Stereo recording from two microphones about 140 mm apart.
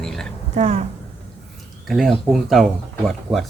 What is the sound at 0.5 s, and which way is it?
Speech, 55° right (ahead or behind).